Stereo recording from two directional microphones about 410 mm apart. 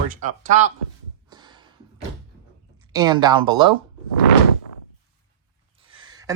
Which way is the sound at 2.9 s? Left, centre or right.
Centre.